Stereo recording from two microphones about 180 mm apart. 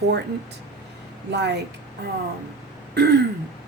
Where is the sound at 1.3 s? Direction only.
70° right (ahead or behind).